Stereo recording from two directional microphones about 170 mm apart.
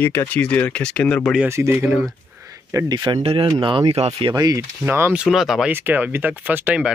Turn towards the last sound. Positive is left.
turn(degrees=-10)  # may be behind; listen again after turning